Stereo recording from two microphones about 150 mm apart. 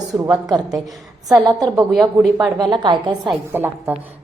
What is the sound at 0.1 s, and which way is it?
Speech, 5° right (ahead or behind).